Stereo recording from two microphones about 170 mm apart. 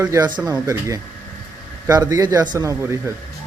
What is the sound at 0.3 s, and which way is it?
A man's voice, 20° right (ahead or behind).